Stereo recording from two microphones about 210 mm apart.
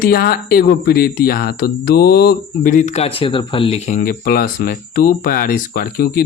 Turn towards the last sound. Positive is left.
turn(degrees=45)  # may be behind; listen again after turning